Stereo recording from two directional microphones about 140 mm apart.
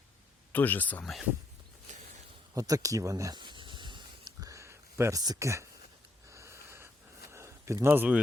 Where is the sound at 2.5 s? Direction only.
25° right (ahead or behind).